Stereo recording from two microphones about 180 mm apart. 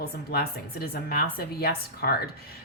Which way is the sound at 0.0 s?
60° left (ahead or behind).